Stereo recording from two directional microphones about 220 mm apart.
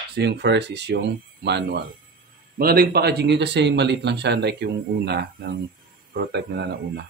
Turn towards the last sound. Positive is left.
turn(degrees=-45)  # may be behind; listen again after turning